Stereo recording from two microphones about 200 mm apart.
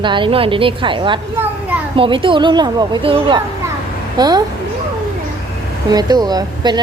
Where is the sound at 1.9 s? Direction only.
25° right (ahead or behind).